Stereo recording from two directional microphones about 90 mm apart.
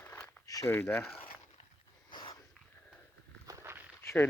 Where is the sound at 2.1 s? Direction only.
65° left (ahead or behind).